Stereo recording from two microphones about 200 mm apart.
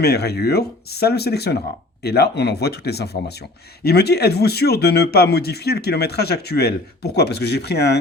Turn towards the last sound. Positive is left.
turn(degrees=55)  # may be behind; listen again after turning